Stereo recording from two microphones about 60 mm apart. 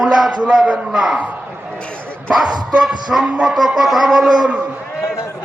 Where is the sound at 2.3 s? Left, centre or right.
Centre.